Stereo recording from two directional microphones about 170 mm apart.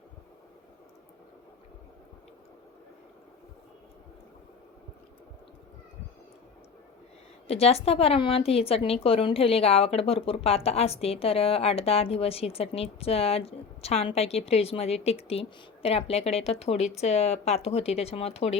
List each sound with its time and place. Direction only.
7.4 s a woman's voice: 35° left (ahead or behind)